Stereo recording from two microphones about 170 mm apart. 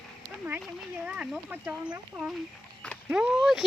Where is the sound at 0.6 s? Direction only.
5° right (ahead or behind).